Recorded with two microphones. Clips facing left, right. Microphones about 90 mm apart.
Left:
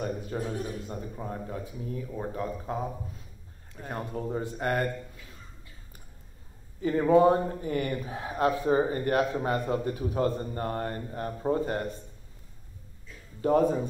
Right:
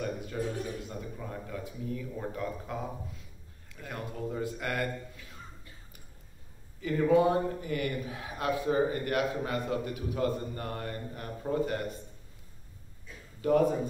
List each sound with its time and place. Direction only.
0.3 s a man's voice: 35° left (ahead or behind)
6.8 s a man's voice: 35° left (ahead or behind)
13.4 s a man's voice: 35° left (ahead or behind)